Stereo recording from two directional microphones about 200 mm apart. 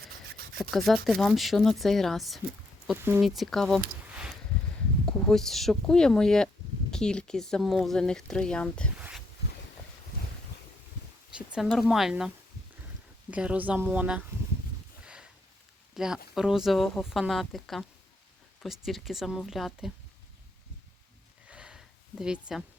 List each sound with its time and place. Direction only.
0.7 s speech: centre (ahead or behind)
11.3 s speech: 5° right (ahead or behind)
13.3 s a woman's voice: 5° right (ahead or behind)
15.0 s a sound: 5° right (ahead or behind)
16.0 s speech: 5° right (ahead or behind)
18.9 s speech: centre (ahead or behind)
21.4 s a sound: 5° right (ahead or behind)